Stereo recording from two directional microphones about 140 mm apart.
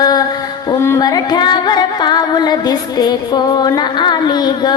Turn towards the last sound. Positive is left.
turn(degrees=30)  # may be behind; listen again after turning